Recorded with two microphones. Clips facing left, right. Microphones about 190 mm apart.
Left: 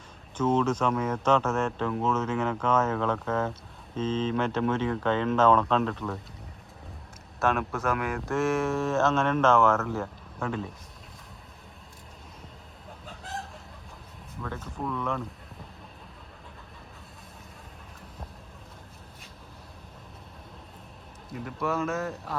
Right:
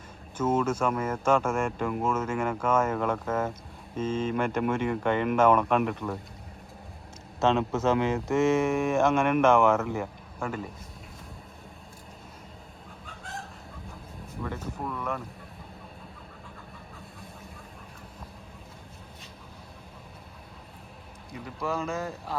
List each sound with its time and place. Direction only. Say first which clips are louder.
0.3 s speech: left 1 dB; 10° right (ahead or behind)
7.3 s speech: right 3 dB; 20° right (ahead or behind)
14.4 s speech: even; 10° right (ahead or behind)
21.4 s speech: left 2 dB; centre (ahead or behind)